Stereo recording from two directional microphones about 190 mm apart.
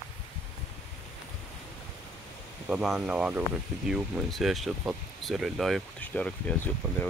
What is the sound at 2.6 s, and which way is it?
Speech, 5° right (ahead or behind).